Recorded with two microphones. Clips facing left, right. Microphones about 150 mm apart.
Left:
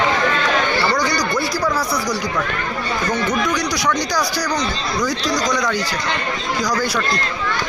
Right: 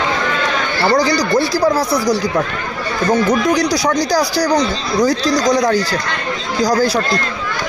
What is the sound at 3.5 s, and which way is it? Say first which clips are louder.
Speech: right 5 dB; 30° right (ahead or behind).